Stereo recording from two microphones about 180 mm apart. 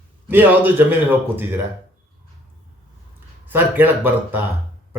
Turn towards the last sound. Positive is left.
turn(degrees=-10)  # may be behind; listen again after turning